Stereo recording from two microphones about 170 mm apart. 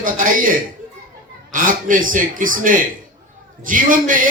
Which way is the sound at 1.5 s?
50° right (ahead or behind).